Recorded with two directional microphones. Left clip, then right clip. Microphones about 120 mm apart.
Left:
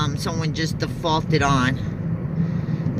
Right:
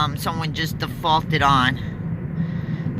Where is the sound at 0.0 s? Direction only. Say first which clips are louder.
Right 3 dB; 15° left (ahead or behind).